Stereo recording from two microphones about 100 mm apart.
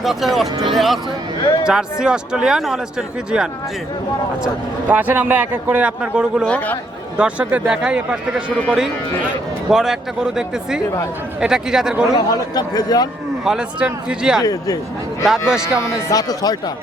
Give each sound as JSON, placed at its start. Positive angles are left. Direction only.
{"t": 0.0, "sound": "a man's voice", "side_deg": 0}
{"t": 4.9, "sound": "a man's voice", "side_deg": -15}
{"t": 9.6, "sound": "a man's voice", "side_deg": -5}
{"t": 12.1, "sound": "a man's voice", "side_deg": 40}
{"t": 13.4, "sound": "a man's voice", "side_deg": -5}
{"t": 15.8, "sound": "a man's voice", "side_deg": 30}